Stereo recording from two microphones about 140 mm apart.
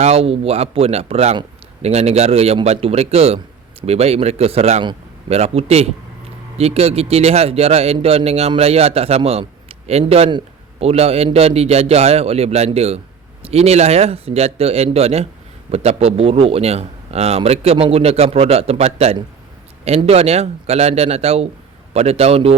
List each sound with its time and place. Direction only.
0.0 s a man's voice: 45° right (ahead or behind)